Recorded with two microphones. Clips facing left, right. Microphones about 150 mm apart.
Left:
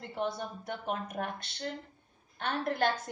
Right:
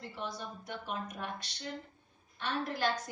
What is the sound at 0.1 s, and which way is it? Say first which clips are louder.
A woman's voice: left 9 dB; 55° left (ahead or behind).